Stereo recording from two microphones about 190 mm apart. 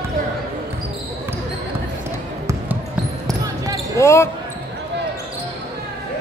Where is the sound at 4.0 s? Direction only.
15° left (ahead or behind).